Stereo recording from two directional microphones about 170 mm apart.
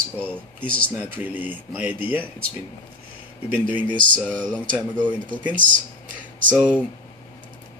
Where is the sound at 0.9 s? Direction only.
10° right (ahead or behind).